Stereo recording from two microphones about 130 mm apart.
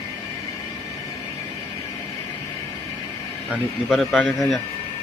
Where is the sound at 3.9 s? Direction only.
Centre (ahead or behind).